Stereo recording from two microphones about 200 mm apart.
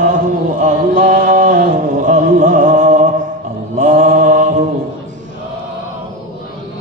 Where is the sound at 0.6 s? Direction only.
40° right (ahead or behind).